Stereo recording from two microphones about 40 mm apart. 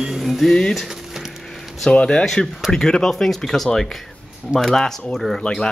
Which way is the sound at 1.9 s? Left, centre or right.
Left.